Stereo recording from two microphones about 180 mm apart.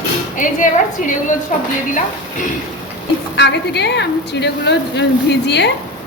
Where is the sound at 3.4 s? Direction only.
70° left (ahead or behind).